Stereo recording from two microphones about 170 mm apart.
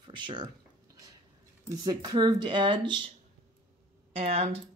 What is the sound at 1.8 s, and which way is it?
Speech, 25° right (ahead or behind).